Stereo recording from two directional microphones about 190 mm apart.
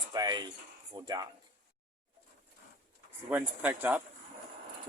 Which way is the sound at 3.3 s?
10° right (ahead or behind).